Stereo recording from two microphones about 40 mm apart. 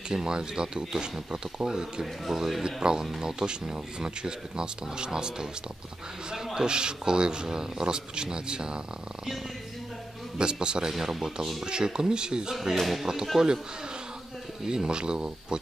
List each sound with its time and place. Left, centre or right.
0.1 s speech: centre
6.3 s a sound: centre
6.7 s speech: right
10.3 s speech: right
10.9 s speech: centre
11.6 s speech: centre
12.7 s speech: centre
13.0 s speech: centre
14.7 s speech: right